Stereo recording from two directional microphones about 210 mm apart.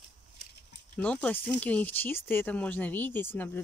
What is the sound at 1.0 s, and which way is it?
Speech, 5° left (ahead or behind).